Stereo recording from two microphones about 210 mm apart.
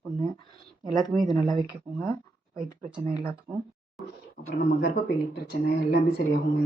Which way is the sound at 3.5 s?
Centre (ahead or behind).